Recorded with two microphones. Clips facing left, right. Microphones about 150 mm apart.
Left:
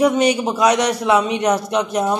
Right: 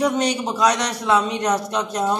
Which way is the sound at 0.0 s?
5° left (ahead or behind).